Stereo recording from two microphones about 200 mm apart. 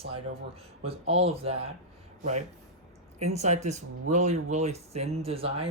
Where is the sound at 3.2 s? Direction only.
35° right (ahead or behind).